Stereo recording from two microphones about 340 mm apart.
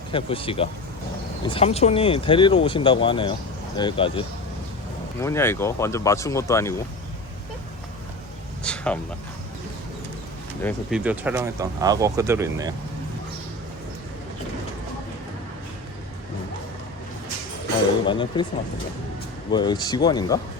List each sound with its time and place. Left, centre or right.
0.1 s speech: centre
8.6 s a sound: centre
10.6 s speech: centre
18.0 s speech: centre
19.5 s speech: centre